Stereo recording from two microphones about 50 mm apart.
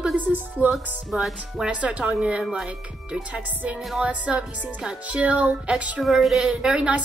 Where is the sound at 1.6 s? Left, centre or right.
Right.